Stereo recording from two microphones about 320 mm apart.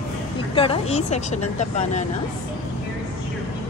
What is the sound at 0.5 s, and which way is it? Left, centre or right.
Speech, centre.